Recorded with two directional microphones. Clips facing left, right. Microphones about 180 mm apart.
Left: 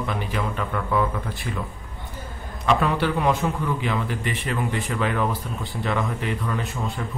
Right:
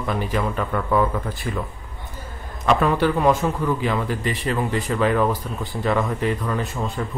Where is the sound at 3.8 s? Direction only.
40° right (ahead or behind).